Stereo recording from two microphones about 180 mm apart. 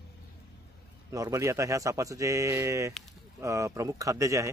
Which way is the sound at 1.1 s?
15° right (ahead or behind).